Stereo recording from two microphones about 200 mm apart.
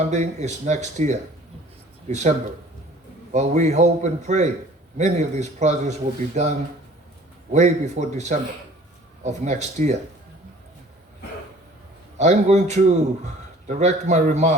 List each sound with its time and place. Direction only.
0.0 s a man's voice: 35° right (ahead or behind)
3.3 s a man's voice: 35° right (ahead or behind)
7.5 s a man's voice: 35° right (ahead or behind)
12.1 s a man's voice: 35° right (ahead or behind)